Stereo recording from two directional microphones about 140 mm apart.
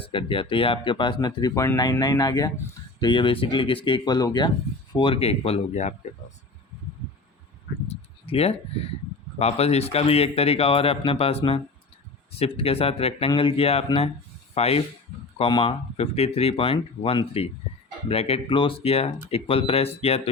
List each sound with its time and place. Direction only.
0.0 s speech: 40° left (ahead or behind); by 6.1 s 55° left (ahead or behind)
7.9 s a sound: 45° left (ahead or behind)
9.4 s speech: 45° left (ahead or behind)